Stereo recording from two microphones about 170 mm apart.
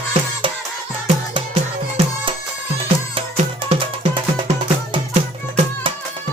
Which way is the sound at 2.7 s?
30° right (ahead or behind).